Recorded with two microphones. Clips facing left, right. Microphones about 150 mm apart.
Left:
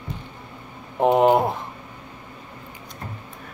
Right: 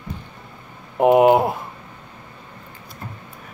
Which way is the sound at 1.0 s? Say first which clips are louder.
Right 3 dB; 10° right (ahead or behind).